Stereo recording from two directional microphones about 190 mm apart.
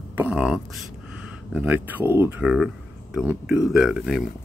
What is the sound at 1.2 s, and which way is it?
Speech, 5° right (ahead or behind).